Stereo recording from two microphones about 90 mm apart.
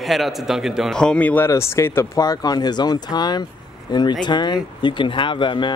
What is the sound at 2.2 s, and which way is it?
Speech, 45° left (ahead or behind).